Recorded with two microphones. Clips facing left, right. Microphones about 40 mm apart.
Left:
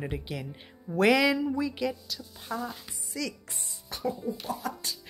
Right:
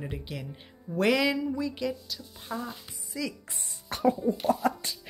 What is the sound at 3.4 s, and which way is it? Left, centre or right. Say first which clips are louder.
Music: right 2 dB; right.